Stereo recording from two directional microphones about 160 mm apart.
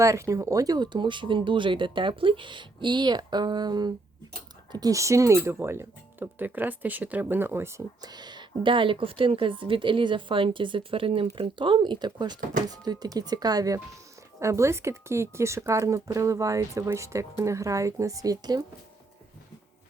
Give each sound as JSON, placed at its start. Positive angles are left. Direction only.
{"t": 0.0, "sound": "speech", "side_deg": -20}